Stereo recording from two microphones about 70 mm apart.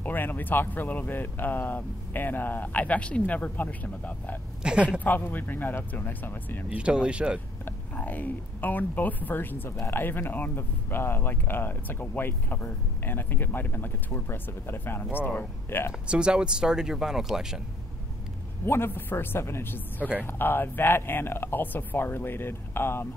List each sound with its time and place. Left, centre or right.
0.0 s speech: left
4.6 s speech: centre
5.0 s speech: left
6.7 s speech: centre
7.6 s speech: left
16.1 s speech: centre
18.7 s speech: left